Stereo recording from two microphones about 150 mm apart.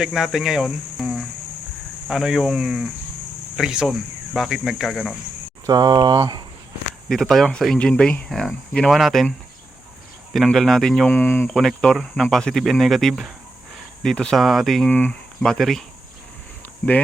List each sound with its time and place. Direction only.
0.0 s speech: 5° right (ahead or behind)
5.6 s speech: 25° right (ahead or behind)
7.1 s speech: 5° left (ahead or behind)
10.3 s speech: centre (ahead or behind)
11.5 s speech: 5° left (ahead or behind)
16.8 s speech: 10° left (ahead or behind)